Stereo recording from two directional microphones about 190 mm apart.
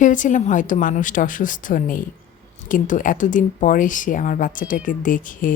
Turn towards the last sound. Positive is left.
turn(degrees=45)  # may be behind; listen again after turning